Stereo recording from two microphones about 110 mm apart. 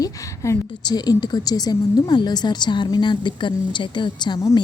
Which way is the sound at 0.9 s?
40° left (ahead or behind).